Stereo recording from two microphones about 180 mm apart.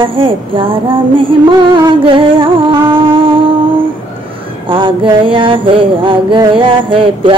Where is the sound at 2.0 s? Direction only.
30° right (ahead or behind).